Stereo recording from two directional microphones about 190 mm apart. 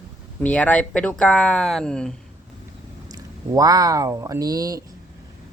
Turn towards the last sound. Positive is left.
turn(degrees=-20)  # may be behind; listen again after turning